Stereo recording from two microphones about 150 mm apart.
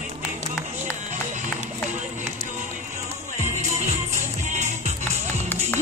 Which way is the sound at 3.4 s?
50° right (ahead or behind).